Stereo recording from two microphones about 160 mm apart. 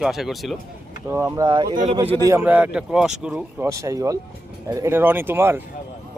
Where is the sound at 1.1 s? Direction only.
20° right (ahead or behind).